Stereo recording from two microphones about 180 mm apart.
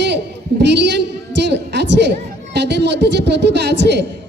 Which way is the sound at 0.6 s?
70° right (ahead or behind).